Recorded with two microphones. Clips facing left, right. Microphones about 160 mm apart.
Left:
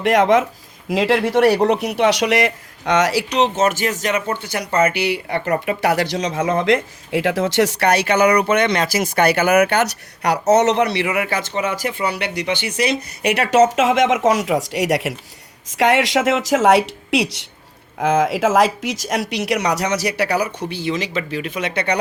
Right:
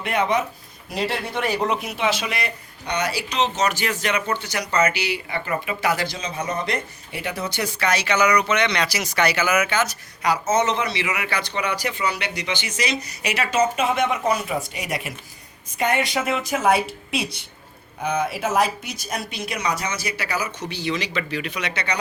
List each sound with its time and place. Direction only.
0.0 s speech: 90° left
15.8 s speech: 90° left; by 21.9 s 55° left (ahead or behind)